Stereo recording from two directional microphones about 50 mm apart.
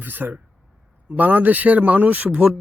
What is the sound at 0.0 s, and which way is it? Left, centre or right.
Speech, right.